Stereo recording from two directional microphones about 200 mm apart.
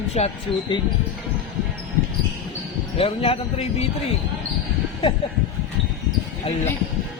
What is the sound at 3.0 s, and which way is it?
Speech, 30° left (ahead or behind).